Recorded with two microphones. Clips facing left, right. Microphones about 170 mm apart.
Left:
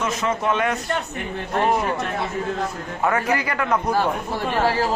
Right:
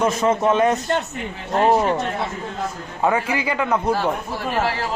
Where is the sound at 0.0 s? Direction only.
30° right (ahead or behind).